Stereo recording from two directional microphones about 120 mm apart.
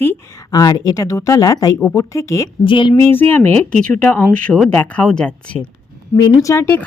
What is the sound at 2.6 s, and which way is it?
Speech, 45° left (ahead or behind).